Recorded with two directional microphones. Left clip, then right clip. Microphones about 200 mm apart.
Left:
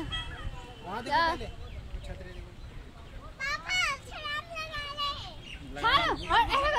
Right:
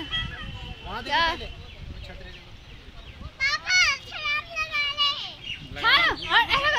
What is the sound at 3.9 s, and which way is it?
Turkey, 20° left (ahead or behind).